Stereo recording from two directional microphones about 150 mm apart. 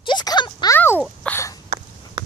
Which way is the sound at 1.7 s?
45° right (ahead or behind).